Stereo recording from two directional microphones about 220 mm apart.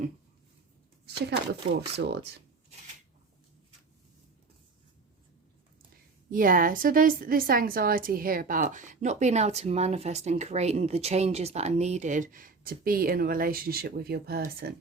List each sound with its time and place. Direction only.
1.7 s speech: 50° right (ahead or behind)
6.3 s a woman's voice: 40° right (ahead or behind)